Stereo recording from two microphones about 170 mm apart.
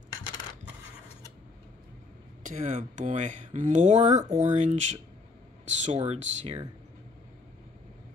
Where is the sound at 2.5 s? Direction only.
45° right (ahead or behind).